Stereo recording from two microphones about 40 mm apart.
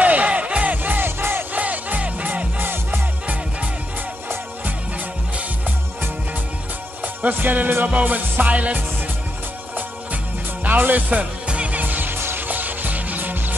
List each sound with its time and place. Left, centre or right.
0.0 s music: right
0.9 s music: right
1.5 s music: right
2.6 s music: right
7.2 s music: right
10.6 s speech: right
11.4 s music: right
11.8 s music: right